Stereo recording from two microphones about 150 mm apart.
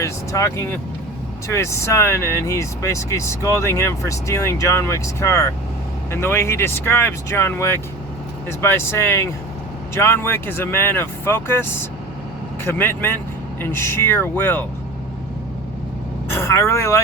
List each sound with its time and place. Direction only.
0.0 s speech: 20° left (ahead or behind)
16.3 s speech: 15° left (ahead or behind)